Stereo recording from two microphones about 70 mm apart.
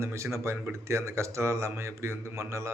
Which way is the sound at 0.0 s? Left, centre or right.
Right.